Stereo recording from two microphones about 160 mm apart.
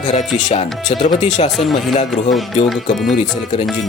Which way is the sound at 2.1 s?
Centre (ahead or behind).